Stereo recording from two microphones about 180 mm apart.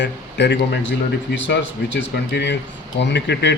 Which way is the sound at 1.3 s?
85° left.